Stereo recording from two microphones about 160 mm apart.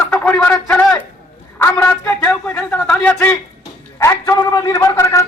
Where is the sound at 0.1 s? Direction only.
5° left (ahead or behind).